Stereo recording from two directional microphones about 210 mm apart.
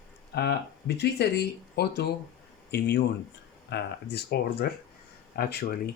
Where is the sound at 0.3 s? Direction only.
55° left (ahead or behind).